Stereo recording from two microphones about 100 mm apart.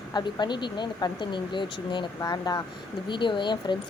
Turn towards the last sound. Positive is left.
turn(degrees=50)  # may be behind; listen again after turning